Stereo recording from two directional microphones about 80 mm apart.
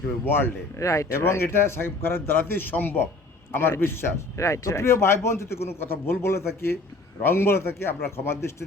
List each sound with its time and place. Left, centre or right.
0.3 s speech: left
0.8 s speech: left